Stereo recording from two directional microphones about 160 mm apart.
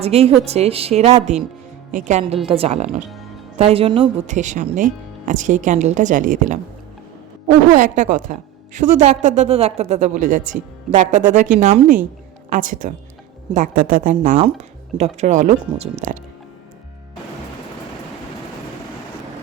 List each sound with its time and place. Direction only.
0.0 s a woman's voice: 40° right (ahead or behind)
1.9 s a woman's voice: 50° right (ahead or behind); by 4.1 s 30° right (ahead or behind)
4.3 s a woman's voice: 50° right (ahead or behind)
14.3 s a woman's voice: 40° right (ahead or behind)